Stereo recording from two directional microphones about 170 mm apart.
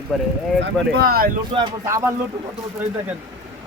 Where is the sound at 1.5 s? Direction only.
35° right (ahead or behind).